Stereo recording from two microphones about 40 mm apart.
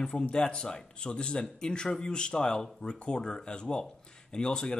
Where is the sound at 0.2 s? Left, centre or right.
Left.